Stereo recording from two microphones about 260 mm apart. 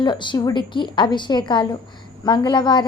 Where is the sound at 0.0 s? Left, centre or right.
Centre.